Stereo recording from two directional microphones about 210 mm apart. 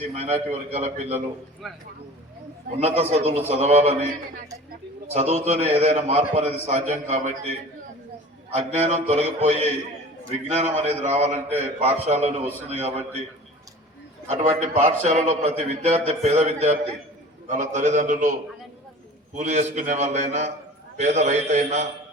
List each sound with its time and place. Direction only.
0.1 s a man's voice: 30° right (ahead or behind)
1.6 s speech: centre (ahead or behind)
2.8 s a man's voice: 30° right (ahead or behind)
5.1 s a man's voice: 30° right (ahead or behind)
8.5 s a man's voice: 30° right (ahead or behind)
14.3 s a man's voice: 30° right (ahead or behind)